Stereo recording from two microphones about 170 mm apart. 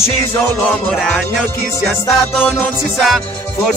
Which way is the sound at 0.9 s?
5° left (ahead or behind).